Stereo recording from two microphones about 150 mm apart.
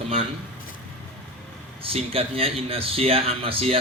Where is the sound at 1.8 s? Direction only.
40° right (ahead or behind).